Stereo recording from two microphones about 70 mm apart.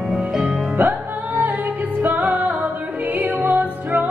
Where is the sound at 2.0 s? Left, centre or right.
Right.